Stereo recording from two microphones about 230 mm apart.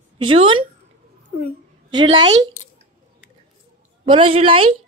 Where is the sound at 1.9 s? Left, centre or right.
Centre.